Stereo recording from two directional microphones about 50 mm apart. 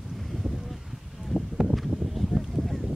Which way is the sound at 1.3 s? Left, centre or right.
Left.